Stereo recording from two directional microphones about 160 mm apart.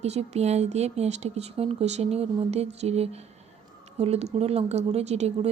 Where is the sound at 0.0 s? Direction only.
40° right (ahead or behind).